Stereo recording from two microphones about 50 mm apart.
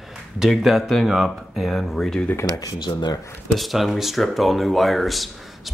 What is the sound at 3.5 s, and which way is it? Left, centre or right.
Speech, centre.